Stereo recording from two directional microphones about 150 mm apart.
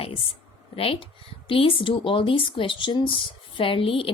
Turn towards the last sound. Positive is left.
turn(degrees=35)  # may be behind; listen again after turning